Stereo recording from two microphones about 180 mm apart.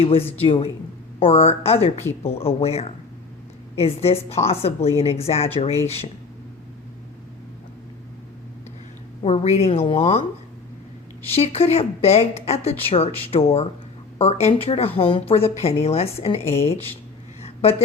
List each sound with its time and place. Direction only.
0.0 s a woman's voice: 30° left (ahead or behind)
9.2 s a woman's voice: 35° left (ahead or behind)
11.3 s a woman's voice: 35° left (ahead or behind)
17.4 s a sound: 35° left (ahead or behind)